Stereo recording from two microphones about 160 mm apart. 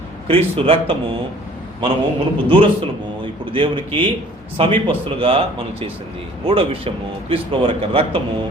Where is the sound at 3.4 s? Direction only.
30° right (ahead or behind).